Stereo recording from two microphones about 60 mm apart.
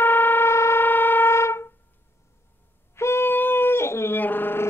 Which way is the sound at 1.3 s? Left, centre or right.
Left.